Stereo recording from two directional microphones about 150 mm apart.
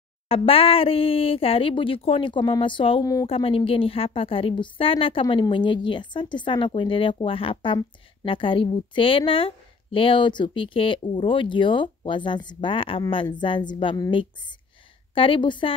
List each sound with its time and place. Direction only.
0.3 s a woman's voice: 40° left (ahead or behind)
3.0 s speech: 25° left (ahead or behind)
3.3 s a woman's voice: 40° left (ahead or behind)
15.1 s a woman's voice: 35° left (ahead or behind)